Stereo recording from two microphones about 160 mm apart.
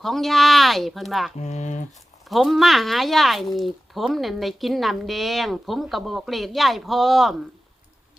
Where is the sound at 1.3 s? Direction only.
45° left (ahead or behind).